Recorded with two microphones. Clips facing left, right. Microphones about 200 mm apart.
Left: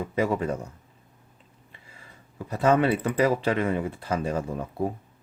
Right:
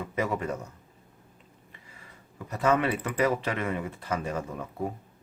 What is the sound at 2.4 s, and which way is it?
Speech, 30° left (ahead or behind).